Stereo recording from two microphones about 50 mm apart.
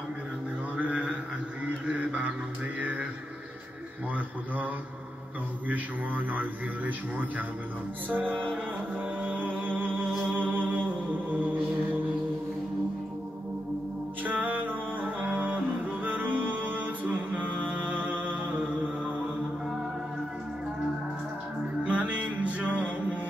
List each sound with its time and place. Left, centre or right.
0.7 s a sound: right
5.7 s a man's voice: right
8.1 s music: right
14.2 s music: right
18.2 s mantra: right
21.8 s music: right